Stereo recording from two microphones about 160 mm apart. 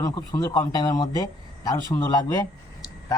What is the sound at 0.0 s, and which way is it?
Speech, 25° left (ahead or behind).